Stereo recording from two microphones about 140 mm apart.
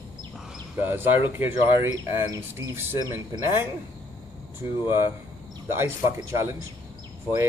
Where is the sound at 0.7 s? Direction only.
15° right (ahead or behind).